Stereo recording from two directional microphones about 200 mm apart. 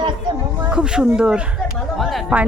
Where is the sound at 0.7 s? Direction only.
5° right (ahead or behind).